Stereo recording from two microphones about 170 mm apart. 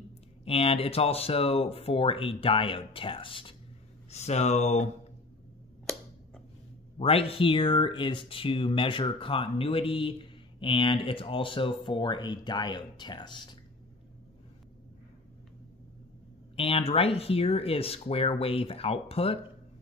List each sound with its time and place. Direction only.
0.5 s speech: 35° left (ahead or behind)
7.0 s speech: 35° left (ahead or behind)
16.5 s speech: 35° left (ahead or behind)